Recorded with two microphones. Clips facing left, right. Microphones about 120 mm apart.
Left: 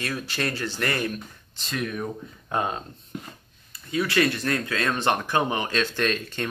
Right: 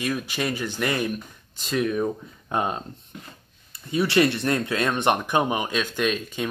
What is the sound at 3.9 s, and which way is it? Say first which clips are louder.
Speech: right 3 dB; 25° right (ahead or behind).